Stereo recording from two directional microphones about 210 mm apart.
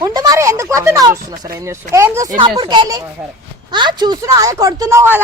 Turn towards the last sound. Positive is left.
turn(degrees=-10)  # may be behind; listen again after turning